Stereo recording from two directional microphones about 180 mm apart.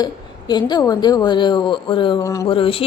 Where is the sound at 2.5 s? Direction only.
30° left (ahead or behind).